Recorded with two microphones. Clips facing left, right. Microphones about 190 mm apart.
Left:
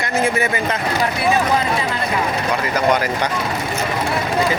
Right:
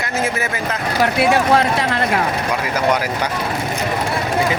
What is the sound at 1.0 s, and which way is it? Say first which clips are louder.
Speech: right 5 dB; 75° right (ahead or behind).